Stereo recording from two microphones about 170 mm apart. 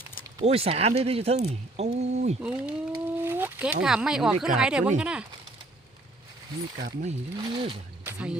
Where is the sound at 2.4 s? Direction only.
5° right (ahead or behind).